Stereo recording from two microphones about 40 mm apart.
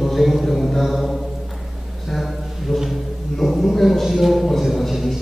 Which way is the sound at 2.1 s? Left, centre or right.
Centre.